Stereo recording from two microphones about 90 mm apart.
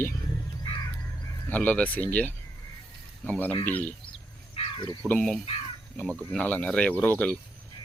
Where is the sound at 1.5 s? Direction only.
15° left (ahead or behind).